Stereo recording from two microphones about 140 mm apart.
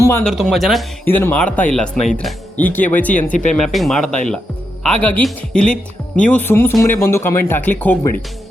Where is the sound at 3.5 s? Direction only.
Centre (ahead or behind).